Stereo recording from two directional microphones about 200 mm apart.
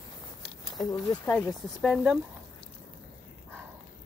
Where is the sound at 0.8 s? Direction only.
20° left (ahead or behind).